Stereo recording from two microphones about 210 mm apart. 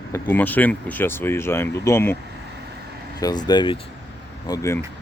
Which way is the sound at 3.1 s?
20° left (ahead or behind).